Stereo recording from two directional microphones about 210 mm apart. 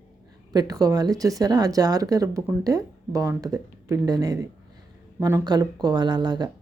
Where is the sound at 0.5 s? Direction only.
15° right (ahead or behind).